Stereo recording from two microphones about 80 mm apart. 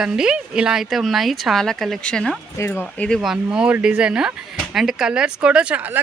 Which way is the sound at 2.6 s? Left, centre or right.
Left.